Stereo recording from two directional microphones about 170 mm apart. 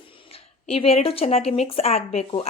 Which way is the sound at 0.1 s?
35° left (ahead or behind).